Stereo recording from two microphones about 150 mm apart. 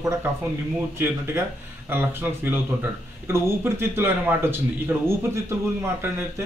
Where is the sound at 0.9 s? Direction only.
15° right (ahead or behind).